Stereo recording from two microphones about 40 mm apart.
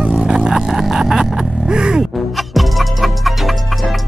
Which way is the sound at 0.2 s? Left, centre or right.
Centre.